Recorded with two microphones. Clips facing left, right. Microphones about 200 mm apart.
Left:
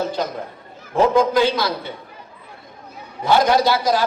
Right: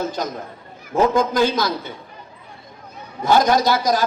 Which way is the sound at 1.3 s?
45° right (ahead or behind).